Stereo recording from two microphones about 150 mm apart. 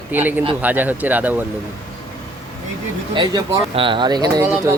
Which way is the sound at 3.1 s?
30° right (ahead or behind).